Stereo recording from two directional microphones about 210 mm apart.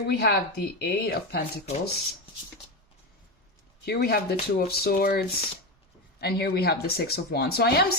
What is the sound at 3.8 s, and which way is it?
Speech, 50° left (ahead or behind).